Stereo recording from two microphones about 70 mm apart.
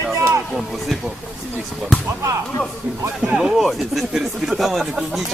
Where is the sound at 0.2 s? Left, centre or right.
Right.